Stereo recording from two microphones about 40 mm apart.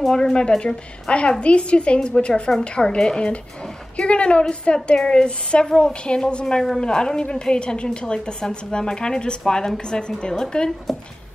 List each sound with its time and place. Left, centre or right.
0.1 s a woman's voice: centre
10.9 s a woman's voice: centre